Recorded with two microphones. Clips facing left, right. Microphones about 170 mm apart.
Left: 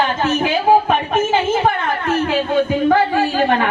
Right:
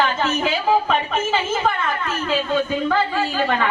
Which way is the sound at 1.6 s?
60° left (ahead or behind).